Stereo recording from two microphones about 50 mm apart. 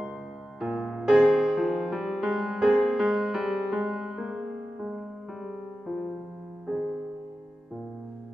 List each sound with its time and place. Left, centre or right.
0.6 s music: centre
2.6 s music: centre
4.1 s music: centre